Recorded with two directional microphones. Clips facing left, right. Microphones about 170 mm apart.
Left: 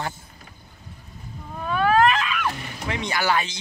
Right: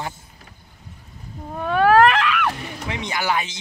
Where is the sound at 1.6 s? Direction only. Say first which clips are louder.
Right 4 dB; 65° right (ahead or behind).